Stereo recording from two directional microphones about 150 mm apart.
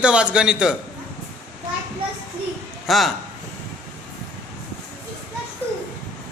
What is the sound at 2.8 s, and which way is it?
Speech, centre (ahead or behind).